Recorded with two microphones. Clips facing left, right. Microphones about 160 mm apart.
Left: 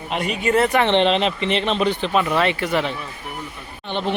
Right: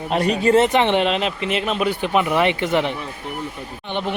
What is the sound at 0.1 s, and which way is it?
Speech, 35° right (ahead or behind).